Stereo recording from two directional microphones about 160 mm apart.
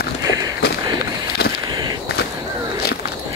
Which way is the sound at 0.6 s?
85° left.